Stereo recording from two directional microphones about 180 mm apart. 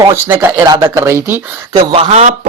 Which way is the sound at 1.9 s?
35° right (ahead or behind).